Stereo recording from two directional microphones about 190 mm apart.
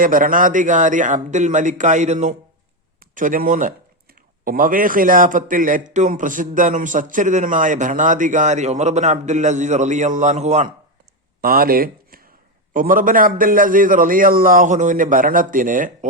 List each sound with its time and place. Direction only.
0.0 s a man's voice: 45° right (ahead or behind)
11.3 s a man's voice: 50° right (ahead or behind)